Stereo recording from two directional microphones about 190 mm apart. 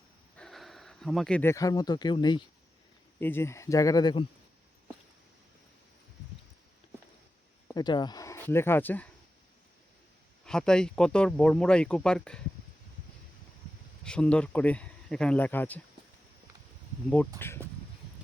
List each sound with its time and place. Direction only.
0.3 s speech: centre (ahead or behind); by 2.4 s 25° left (ahead or behind)
3.2 s speech: 10° left (ahead or behind)
7.8 s speech: 20° left (ahead or behind)
10.4 s speech: 5° left (ahead or behind)
14.0 s speech: 5° left (ahead or behind)
17.4 s speech: 10° left (ahead or behind)